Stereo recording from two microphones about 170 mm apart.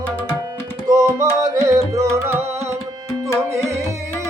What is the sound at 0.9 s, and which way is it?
Music, 20° right (ahead or behind).